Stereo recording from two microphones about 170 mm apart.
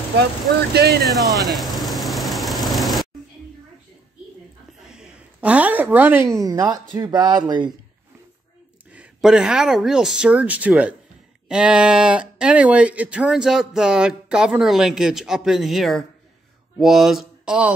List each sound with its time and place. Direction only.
0.7 s speech: 70° right (ahead or behind)
1.0 s speech: centre (ahead or behind)
1.4 s vehicle: centre (ahead or behind)
4.8 s a woman's voice: 5° right (ahead or behind); by 7.7 s 25° right (ahead or behind)
8.9 s speech: 5° right (ahead or behind)